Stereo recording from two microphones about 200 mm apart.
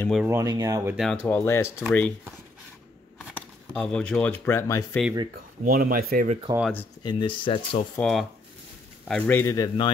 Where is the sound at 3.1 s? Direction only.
Centre (ahead or behind).